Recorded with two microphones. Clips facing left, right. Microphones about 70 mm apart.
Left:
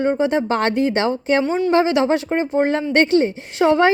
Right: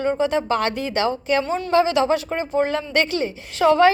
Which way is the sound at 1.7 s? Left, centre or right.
Left.